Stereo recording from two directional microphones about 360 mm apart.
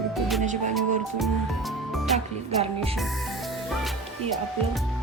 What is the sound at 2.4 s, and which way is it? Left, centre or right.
Music, centre.